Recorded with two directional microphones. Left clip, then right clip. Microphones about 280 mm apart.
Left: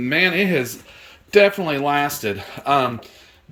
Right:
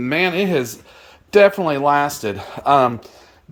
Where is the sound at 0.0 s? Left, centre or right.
Centre.